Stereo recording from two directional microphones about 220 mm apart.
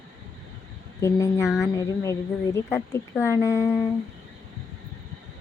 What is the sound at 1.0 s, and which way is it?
Speech, 15° left (ahead or behind).